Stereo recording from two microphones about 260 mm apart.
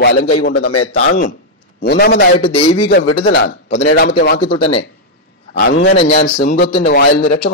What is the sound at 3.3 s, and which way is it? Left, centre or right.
A man's voice, left.